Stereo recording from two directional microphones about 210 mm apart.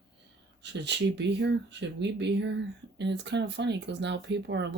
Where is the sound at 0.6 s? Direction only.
55° right (ahead or behind).